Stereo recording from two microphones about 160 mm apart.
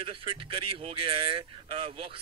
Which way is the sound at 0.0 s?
35° right (ahead or behind).